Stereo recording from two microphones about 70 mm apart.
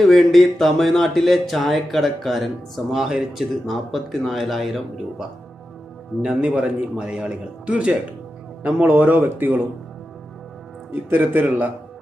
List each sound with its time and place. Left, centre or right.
0.0 s speech: centre
6.2 s speech: centre
8.6 s speech: right
11.1 s speech: right